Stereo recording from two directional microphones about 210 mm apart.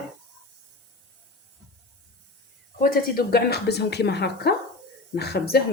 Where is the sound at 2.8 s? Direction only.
45° left (ahead or behind).